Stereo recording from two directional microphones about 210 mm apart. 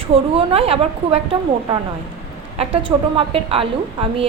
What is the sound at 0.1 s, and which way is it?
A woman's voice, 30° right (ahead or behind).